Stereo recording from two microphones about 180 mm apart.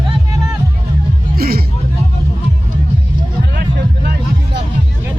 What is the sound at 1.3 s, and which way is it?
Music, 60° right (ahead or behind).